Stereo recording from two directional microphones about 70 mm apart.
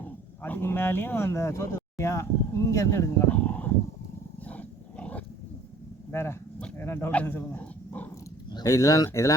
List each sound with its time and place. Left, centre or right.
0.0 s speech: left
3.2 s a sound: left
4.4 s roaring cats: left
6.1 s a man's voice: left
7.6 s dog: left
8.6 s speech: left